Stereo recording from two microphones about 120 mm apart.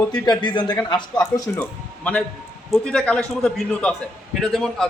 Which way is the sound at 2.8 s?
10° left (ahead or behind).